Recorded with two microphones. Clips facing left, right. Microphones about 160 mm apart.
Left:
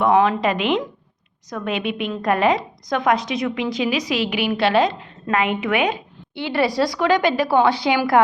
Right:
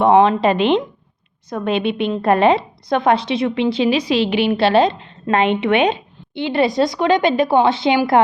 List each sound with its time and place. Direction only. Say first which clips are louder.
0.0 s a woman's voice: right 4 dB; 25° right (ahead or behind)